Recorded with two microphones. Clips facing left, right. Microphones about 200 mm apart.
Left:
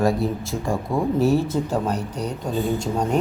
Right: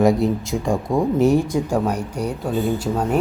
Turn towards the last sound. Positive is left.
turn(degrees=-5)  # may be behind; listen again after turning